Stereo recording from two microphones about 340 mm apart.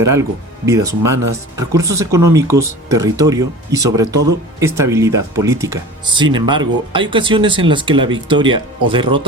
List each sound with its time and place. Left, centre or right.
0.0 s speech: centre